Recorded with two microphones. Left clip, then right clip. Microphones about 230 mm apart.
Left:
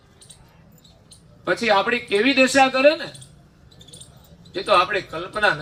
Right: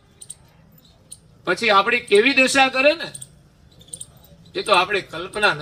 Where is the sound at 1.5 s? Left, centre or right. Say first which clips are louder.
Right 2 dB; right.